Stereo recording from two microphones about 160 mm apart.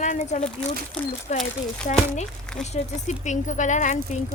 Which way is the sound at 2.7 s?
45° left (ahead or behind).